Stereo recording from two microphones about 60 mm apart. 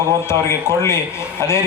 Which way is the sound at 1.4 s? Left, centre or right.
Left.